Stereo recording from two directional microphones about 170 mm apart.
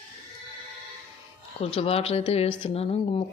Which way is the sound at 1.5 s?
35° left (ahead or behind).